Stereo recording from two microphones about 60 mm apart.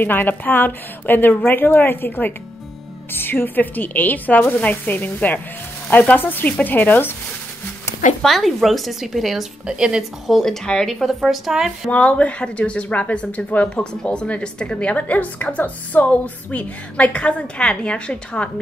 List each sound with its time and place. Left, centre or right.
0.0 s a woman's voice: left
8.2 s speech: centre
9.7 s speech: centre
10.2 s speech: centre
11.9 s speech: left